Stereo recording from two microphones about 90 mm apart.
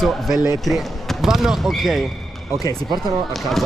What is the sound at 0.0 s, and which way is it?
Speech, centre (ahead or behind).